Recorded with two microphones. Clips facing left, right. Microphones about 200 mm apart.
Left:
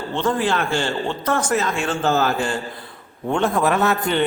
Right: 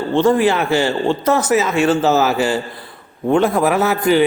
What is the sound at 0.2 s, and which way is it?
A man's voice, 10° right (ahead or behind).